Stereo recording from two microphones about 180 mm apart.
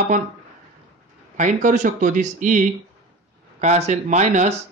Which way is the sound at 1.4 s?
45° right (ahead or behind).